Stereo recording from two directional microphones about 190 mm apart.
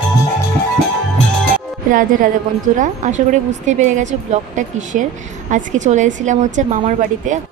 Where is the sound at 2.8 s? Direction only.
40° right (ahead or behind).